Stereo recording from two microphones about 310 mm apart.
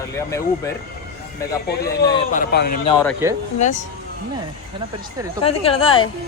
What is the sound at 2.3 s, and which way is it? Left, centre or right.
Speech, left.